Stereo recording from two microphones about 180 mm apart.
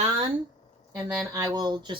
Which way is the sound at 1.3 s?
20° right (ahead or behind).